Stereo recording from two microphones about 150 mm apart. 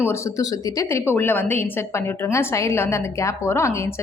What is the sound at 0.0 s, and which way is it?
A woman's voice, 20° left (ahead or behind).